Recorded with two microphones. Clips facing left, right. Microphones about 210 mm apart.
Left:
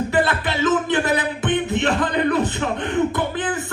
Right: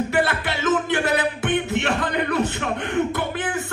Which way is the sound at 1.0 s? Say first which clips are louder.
Left 1 dB; 15° left (ahead or behind).